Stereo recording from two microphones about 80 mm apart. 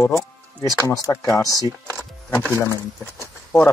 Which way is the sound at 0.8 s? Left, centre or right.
Left.